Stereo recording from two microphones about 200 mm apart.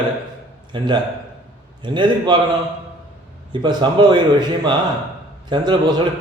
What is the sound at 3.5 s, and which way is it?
Speech, 20° right (ahead or behind).